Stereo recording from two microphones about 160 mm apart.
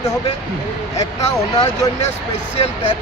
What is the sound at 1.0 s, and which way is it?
Speech, 20° left (ahead or behind).